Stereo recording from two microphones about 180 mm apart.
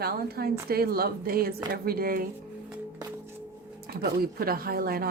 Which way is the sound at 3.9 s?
55° right (ahead or behind).